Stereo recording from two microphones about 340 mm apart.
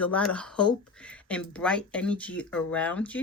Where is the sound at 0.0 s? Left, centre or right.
Centre.